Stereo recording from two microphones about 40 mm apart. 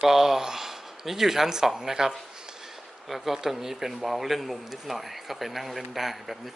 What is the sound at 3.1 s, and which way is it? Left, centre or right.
A man's voice, centre.